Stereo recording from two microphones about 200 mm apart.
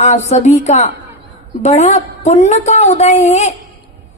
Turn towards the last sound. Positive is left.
turn(degrees=35)  # may be behind; listen again after turning